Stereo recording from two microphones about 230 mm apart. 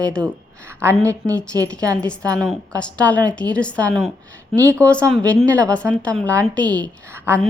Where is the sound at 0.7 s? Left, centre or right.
Centre.